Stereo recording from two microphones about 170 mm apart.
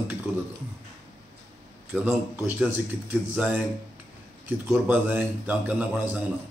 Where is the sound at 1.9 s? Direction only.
5° right (ahead or behind).